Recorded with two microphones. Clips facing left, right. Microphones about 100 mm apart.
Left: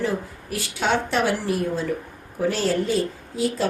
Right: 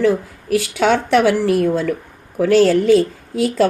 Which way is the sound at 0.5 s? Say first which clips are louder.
Right 8 dB; 90° right.